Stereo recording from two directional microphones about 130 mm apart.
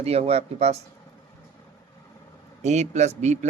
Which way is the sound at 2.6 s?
60° right (ahead or behind).